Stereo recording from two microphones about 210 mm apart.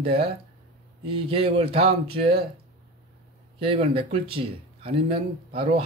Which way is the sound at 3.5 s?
30° right (ahead or behind).